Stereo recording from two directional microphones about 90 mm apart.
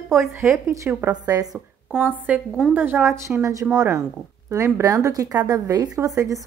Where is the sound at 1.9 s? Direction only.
10° left (ahead or behind).